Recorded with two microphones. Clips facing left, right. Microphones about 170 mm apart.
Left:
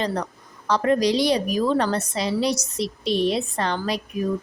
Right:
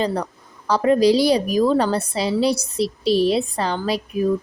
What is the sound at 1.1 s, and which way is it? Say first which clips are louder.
A woman's voice: right 4 dB; 35° right (ahead or behind).